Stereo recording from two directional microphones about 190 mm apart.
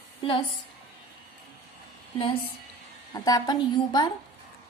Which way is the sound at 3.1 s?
20° left (ahead or behind).